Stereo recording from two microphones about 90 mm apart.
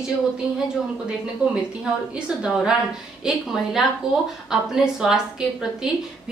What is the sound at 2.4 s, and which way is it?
A woman's voice, 10° right (ahead or behind).